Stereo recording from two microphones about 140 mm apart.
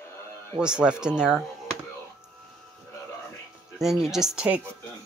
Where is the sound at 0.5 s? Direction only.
5° right (ahead or behind).